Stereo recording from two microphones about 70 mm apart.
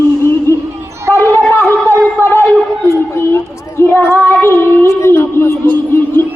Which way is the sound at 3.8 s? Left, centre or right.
Left.